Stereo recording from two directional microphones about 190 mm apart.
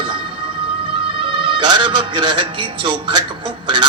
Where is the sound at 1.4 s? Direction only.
25° right (ahead or behind).